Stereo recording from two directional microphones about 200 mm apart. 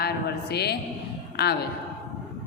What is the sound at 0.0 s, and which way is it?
Speech, 55° left (ahead or behind).